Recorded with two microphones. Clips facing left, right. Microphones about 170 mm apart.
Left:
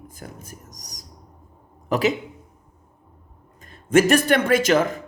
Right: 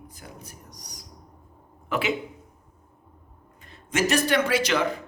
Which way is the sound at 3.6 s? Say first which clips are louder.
Left 9 dB; 50° left (ahead or behind).